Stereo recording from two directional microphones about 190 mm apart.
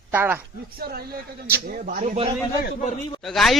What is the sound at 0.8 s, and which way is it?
A man's voice, 55° right (ahead or behind).